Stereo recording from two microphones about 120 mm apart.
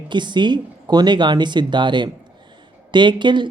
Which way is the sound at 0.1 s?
40° right (ahead or behind).